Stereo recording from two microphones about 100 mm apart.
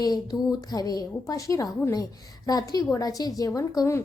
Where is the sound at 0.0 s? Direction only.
40° left (ahead or behind).